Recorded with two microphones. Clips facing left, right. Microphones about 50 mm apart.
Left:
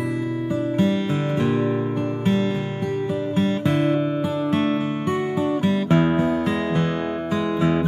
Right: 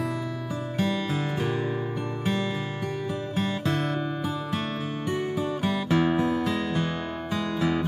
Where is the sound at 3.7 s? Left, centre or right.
Centre.